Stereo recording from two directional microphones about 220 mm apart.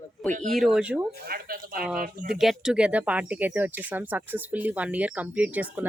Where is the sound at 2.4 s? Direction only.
Centre (ahead or behind).